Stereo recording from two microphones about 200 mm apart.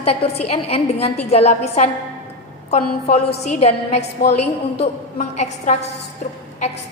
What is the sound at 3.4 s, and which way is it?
A woman's voice, 35° left (ahead or behind).